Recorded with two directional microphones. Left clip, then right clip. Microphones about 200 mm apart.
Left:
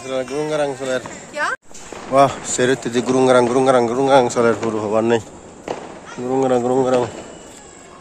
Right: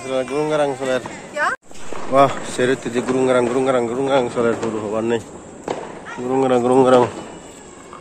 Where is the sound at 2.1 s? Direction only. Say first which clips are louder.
Left 1 dB; 20° left (ahead or behind).